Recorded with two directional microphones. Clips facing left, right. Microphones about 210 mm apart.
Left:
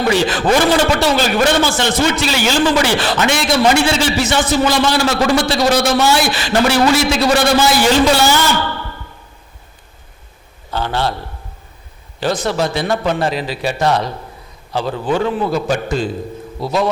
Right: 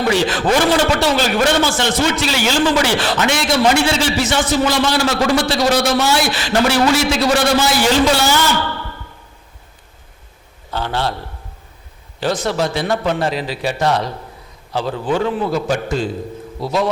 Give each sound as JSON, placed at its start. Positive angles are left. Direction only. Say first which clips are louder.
{"t": 0.0, "sound": "a man's voice", "louder": "left 1 dB", "side_deg": 10}
{"t": 10.7, "sound": "a man's voice", "louder": "left 2 dB", "side_deg": 15}
{"t": 12.2, "sound": "a man's voice", "louder": "left 1 dB", "side_deg": 10}